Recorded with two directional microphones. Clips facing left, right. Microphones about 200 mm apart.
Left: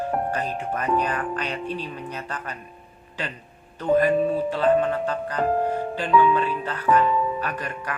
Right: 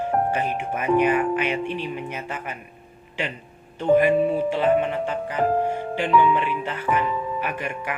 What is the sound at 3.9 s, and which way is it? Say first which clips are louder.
Speech: right 2 dB; 10° right (ahead or behind).